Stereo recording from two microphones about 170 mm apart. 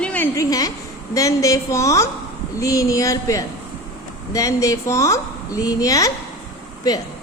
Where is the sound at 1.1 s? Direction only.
20° left (ahead or behind).